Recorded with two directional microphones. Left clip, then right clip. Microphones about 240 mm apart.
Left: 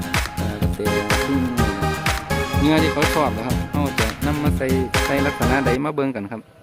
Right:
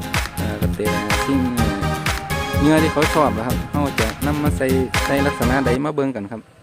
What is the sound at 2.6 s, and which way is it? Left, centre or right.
Speech, centre.